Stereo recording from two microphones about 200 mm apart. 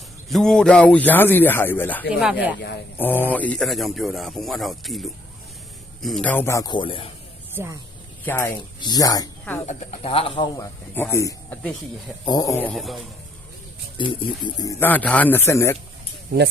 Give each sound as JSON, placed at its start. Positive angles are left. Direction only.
{"t": 0.3, "sound": "speech", "side_deg": 0}
{"t": 2.2, "sound": "speech", "side_deg": -5}
{"t": 3.0, "sound": "speech", "side_deg": 10}
{"t": 7.5, "sound": "speech", "side_deg": -10}
{"t": 8.2, "sound": "speech", "side_deg": 10}
{"t": 9.6, "sound": "speech", "side_deg": 30}
{"t": 14.0, "sound": "speech", "side_deg": 25}
{"t": 14.8, "sound": "speech", "side_deg": 10}